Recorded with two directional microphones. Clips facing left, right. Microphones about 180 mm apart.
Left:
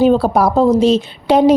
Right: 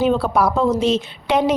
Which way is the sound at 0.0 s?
40° left (ahead or behind).